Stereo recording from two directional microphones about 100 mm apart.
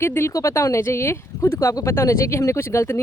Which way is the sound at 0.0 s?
25° left (ahead or behind).